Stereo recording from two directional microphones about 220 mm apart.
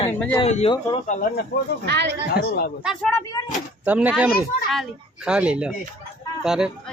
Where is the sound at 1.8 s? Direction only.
50° right (ahead or behind).